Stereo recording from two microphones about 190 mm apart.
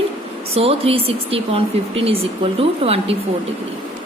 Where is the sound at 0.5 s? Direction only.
30° right (ahead or behind).